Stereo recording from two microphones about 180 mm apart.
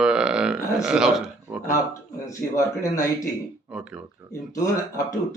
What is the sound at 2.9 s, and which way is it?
Speech, 15° left (ahead or behind).